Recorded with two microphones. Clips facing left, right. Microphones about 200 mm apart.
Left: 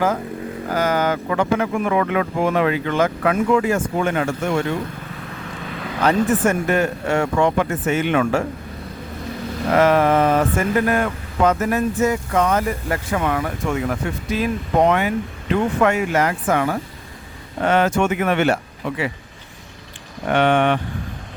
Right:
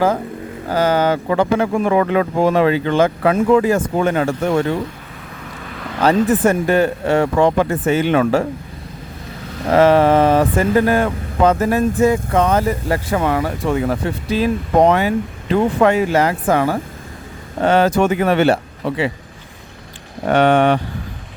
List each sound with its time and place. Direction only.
0.7 s speech: 30° right (ahead or behind)
6.0 s speech: 35° right (ahead or behind)
9.7 s speech: 30° right (ahead or behind)
20.3 s speech: 40° right (ahead or behind)